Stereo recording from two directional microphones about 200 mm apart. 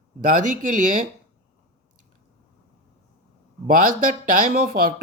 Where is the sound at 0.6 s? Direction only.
40° right (ahead or behind).